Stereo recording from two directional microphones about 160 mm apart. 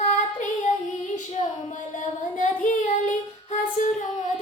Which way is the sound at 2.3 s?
50° left (ahead or behind).